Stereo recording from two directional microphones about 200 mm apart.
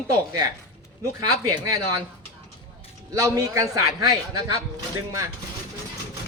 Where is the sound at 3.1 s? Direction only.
15° right (ahead or behind).